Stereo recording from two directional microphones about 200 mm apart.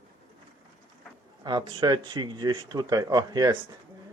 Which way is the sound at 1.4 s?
20° right (ahead or behind).